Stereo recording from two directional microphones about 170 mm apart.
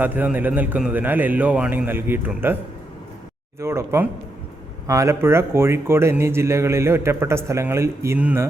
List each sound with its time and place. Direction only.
0.0 s speech: 10° right (ahead or behind)
3.6 s speech: 15° right (ahead or behind)